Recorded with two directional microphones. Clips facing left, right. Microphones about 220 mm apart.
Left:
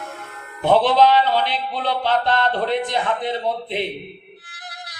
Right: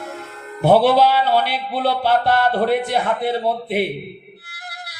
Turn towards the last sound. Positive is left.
turn(degrees=-10)  # may be behind; listen again after turning